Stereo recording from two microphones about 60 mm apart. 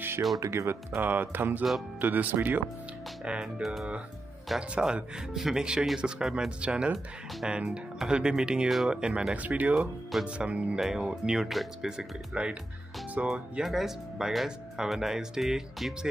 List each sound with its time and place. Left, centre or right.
0.4 s speech: right
0.9 s speech: right
3.3 s speech: centre
8.9 s speech: centre